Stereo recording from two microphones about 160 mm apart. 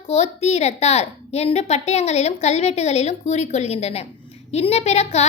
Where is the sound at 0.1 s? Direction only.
40° left (ahead or behind).